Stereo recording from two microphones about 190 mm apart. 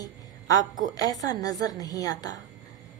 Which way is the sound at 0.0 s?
20° left (ahead or behind).